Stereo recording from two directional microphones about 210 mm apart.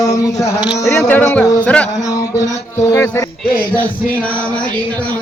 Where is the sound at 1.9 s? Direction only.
15° left (ahead or behind).